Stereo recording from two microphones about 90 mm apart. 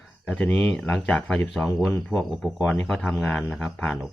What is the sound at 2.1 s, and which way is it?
Speech, 5° right (ahead or behind).